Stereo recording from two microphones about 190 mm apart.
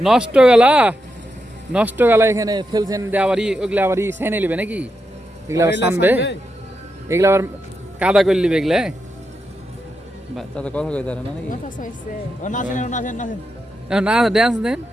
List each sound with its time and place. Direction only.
0.0 s a man's voice: 5° right (ahead or behind)
10.3 s speech: 5° left (ahead or behind)
12.4 s a man's voice: 40° left (ahead or behind)
13.8 s speech: 5° right (ahead or behind)